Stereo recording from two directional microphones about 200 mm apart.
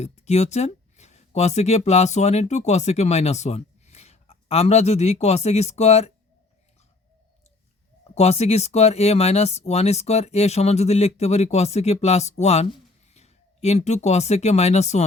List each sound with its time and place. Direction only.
0.0 s speech: 35° left (ahead or behind)
8.1 s speech: 30° left (ahead or behind)